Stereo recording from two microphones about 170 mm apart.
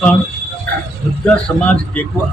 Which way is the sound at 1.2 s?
10° left (ahead or behind).